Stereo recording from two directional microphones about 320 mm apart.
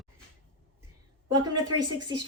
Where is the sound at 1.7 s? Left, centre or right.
Right.